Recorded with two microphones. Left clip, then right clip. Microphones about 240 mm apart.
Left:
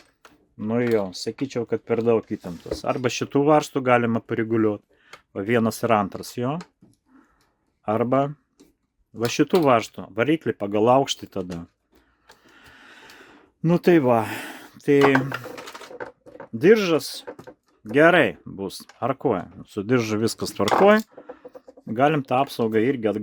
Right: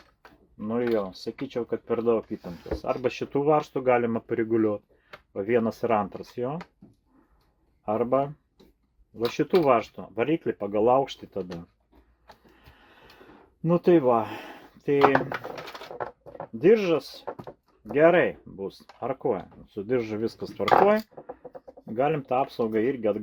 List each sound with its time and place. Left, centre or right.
0.6 s speech: left
7.9 s speech: left
12.5 s a sound: left
13.6 s speech: left
16.6 s speech: left
17.3 s a sound: centre
17.9 s speech: left